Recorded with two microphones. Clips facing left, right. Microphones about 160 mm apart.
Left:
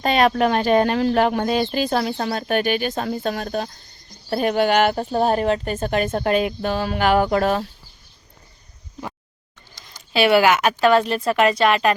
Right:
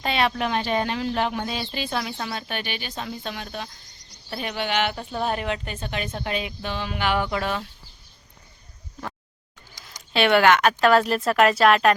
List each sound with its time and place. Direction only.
0.0 s speech: 45° left (ahead or behind)
10.1 s a woman's voice: 5° left (ahead or behind)